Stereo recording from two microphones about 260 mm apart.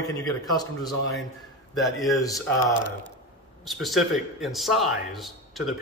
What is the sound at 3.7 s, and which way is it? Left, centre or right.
A man's voice, centre.